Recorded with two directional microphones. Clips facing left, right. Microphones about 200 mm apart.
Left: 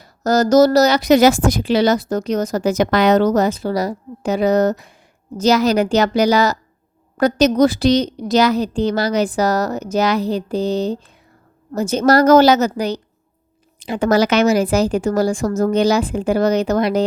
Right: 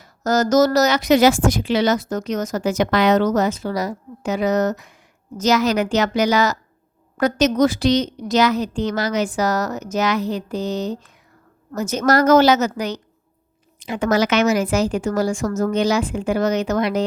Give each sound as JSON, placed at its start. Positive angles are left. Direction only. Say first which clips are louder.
{"t": 0.0, "sound": "a woman's voice", "louder": "left 3 dB", "side_deg": 35}